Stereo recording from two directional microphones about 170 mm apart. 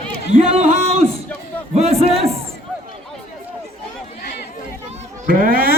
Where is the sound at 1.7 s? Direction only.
40° right (ahead or behind).